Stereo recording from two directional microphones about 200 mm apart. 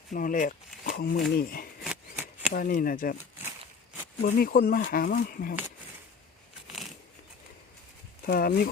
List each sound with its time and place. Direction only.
0.1 s speech: 40° left (ahead or behind)
1.8 s shuffling cards: 5° right (ahead or behind)
2.5 s speech: 45° left (ahead or behind)
4.2 s speech: 45° left (ahead or behind)
8.3 s speech: 50° left (ahead or behind)